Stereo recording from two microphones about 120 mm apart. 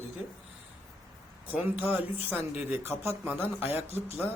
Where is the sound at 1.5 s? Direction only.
15° right (ahead or behind).